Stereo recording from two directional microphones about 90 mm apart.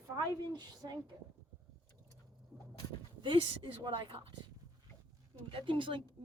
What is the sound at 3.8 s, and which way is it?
Speech, 75° right (ahead or behind).